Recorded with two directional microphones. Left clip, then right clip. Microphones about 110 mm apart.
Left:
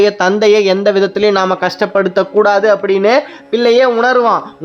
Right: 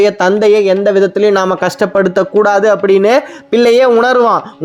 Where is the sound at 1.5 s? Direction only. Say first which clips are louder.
Right 1 dB; 30° right (ahead or behind).